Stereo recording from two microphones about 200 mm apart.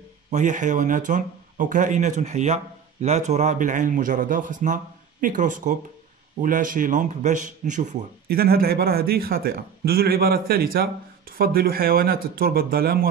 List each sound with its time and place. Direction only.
0.3 s speech: 40° right (ahead or behind)